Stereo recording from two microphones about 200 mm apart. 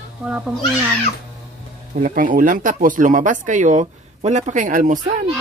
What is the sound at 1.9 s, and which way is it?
Speech, 40° right (ahead or behind).